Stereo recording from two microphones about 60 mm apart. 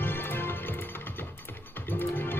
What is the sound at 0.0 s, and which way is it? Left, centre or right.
Music, left.